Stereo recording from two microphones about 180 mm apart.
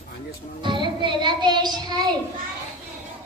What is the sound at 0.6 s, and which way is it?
A child's voice, 25° right (ahead or behind).